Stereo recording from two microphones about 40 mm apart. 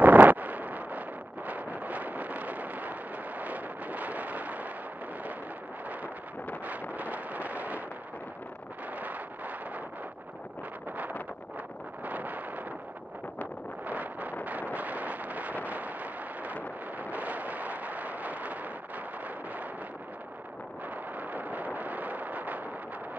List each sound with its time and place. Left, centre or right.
0.0 s wind noise: right
6.6 s wind noise: right
12.0 s wind noise: right
13.8 s wind noise: right
17.1 s eruption: right
21.2 s eruption: right